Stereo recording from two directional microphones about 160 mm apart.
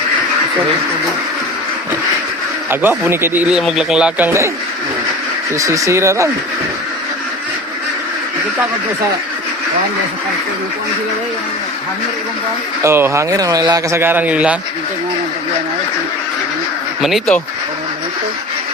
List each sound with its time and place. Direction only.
2.6 s speech: 10° right (ahead or behind)
4.3 s speech: 20° right (ahead or behind)
5.5 s speech: 20° right (ahead or behind)
12.8 s speech: 15° right (ahead or behind)
17.0 s speech: centre (ahead or behind)